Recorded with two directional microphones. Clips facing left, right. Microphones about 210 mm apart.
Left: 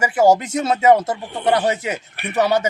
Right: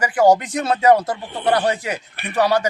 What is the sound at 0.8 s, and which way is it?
A man's voice, 25° left (ahead or behind).